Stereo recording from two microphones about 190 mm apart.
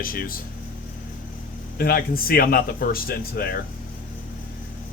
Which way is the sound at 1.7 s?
50° left (ahead or behind).